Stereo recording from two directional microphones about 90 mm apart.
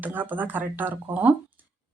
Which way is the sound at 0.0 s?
20° right (ahead or behind).